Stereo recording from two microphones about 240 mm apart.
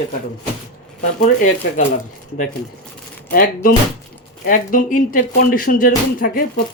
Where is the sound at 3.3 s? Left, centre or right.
Left.